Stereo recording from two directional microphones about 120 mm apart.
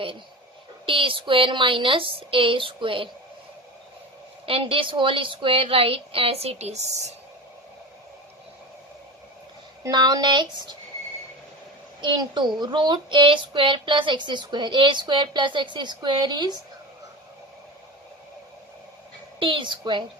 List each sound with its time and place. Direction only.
0.9 s a woman's voice: 45° right (ahead or behind)
4.4 s a woman's voice: 50° right (ahead or behind); by 7.1 s 65° right (ahead or behind)
9.8 s speech: 35° right (ahead or behind)
12.0 s speech: 40° right (ahead or behind)
19.4 s a woman's voice: 45° right (ahead or behind)